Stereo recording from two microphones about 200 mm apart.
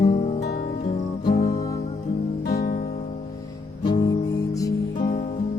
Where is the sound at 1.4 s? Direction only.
15° left (ahead or behind).